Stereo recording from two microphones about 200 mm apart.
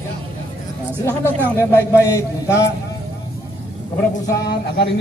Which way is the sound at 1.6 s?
15° left (ahead or behind).